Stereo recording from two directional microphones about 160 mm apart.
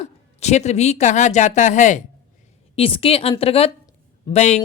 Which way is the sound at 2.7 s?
35° left (ahead or behind).